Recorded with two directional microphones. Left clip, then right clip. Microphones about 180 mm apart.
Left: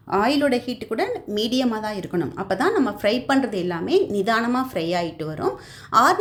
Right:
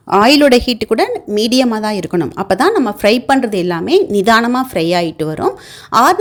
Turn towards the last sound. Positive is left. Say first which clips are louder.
# right 6 dB
turn(degrees=-45)  # may be behind; listen again after turning